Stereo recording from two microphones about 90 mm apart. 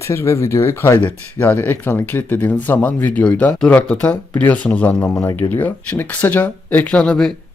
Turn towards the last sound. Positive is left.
turn(degrees=10)  # may be behind; listen again after turning